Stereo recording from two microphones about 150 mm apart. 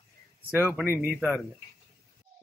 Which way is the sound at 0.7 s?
15° right (ahead or behind).